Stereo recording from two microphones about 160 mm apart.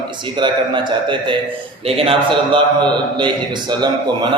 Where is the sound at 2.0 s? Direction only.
35° right (ahead or behind).